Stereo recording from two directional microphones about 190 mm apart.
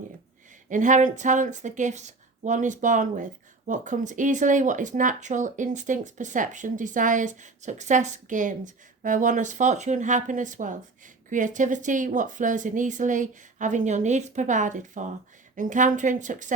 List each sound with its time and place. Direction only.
0.7 s speech: 40° right (ahead or behind)